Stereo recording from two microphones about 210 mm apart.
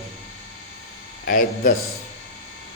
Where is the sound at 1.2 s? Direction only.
40° left (ahead or behind).